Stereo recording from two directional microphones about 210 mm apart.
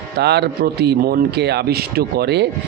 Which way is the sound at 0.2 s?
50° right (ahead or behind).